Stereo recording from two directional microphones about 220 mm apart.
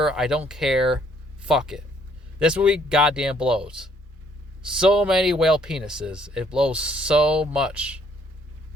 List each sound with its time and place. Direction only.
0.0 s speech: centre (ahead or behind)